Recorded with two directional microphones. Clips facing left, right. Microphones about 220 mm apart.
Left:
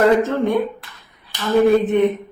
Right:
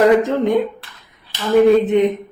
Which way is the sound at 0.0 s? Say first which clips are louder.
Right 2 dB; 15° right (ahead or behind).